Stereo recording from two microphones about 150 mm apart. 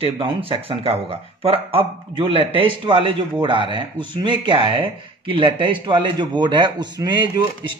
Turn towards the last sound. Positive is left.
turn(degrees=-30)  # may be behind; listen again after turning